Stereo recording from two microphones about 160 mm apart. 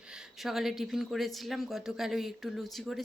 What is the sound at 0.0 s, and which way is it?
Speech, 5° right (ahead or behind).